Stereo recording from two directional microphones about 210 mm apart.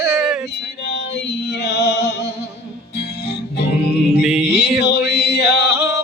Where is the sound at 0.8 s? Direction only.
55° left (ahead or behind).